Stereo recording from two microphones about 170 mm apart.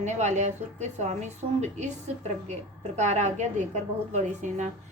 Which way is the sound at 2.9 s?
40° right (ahead or behind).